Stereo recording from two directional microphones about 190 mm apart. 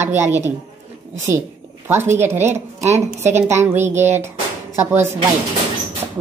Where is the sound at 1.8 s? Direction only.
10° right (ahead or behind).